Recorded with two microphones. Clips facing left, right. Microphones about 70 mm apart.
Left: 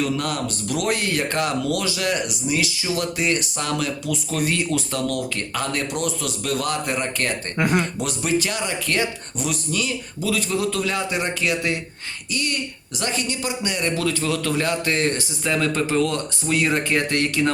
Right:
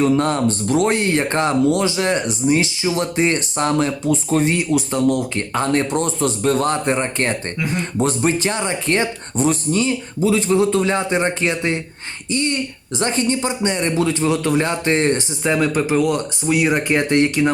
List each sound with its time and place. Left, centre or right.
0.0 s speech: right
7.6 s speech: left
7.9 s a man's voice: right